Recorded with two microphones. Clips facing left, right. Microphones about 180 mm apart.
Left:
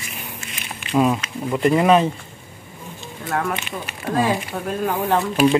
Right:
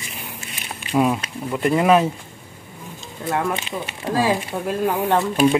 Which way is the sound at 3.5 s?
30° right (ahead or behind).